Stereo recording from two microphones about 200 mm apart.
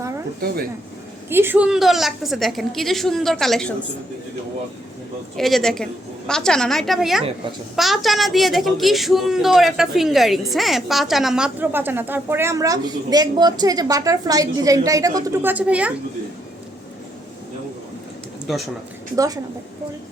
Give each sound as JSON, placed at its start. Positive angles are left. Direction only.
{"t": 1.3, "sound": "a woman's voice", "side_deg": -10}
{"t": 5.4, "sound": "a woman's voice", "side_deg": 0}
{"t": 18.4, "sound": "speech", "side_deg": 0}
{"t": 19.1, "sound": "a woman's voice", "side_deg": -15}